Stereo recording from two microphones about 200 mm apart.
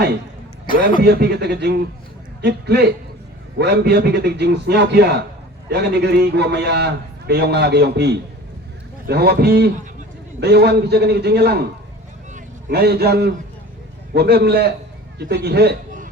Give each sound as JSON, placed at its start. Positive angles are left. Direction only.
{"t": 1.0, "sound": "a man's voice", "side_deg": -55}
{"t": 12.7, "sound": "a man's voice", "side_deg": -55}